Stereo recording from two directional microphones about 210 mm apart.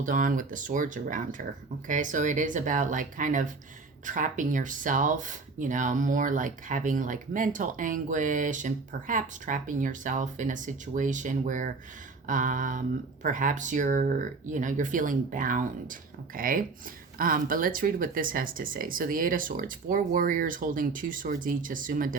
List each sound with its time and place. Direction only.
0.0 s speech: 40° right (ahead or behind)